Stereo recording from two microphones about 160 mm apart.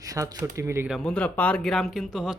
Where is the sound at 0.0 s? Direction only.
20° right (ahead or behind).